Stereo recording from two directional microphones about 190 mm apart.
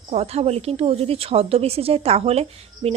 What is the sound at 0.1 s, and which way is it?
Speech, 35° right (ahead or behind).